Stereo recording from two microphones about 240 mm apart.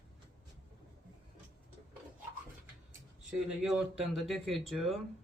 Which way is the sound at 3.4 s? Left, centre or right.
Centre.